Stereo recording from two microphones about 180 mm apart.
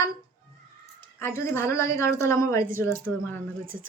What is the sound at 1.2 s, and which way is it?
Child singing, 15° left (ahead or behind).